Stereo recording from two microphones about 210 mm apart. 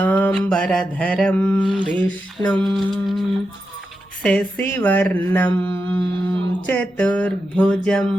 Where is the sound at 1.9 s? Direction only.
5° left (ahead or behind).